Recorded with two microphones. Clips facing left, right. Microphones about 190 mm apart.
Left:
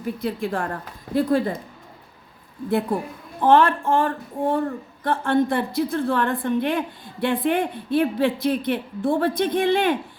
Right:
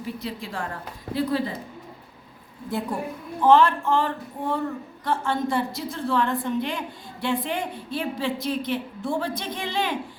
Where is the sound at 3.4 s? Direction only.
55° left (ahead or behind).